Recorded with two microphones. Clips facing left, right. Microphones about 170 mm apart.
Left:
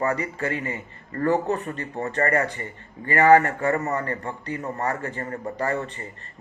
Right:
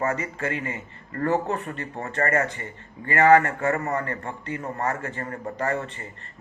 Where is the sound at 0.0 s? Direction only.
35° left (ahead or behind).